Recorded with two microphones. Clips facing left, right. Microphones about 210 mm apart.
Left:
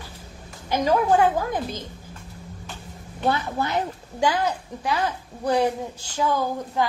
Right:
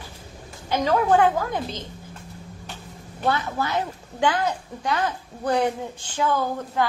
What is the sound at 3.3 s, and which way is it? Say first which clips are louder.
A woman's voice: even; 15° left (ahead or behind).